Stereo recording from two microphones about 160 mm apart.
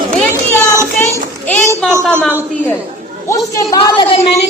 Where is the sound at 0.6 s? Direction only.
15° right (ahead or behind).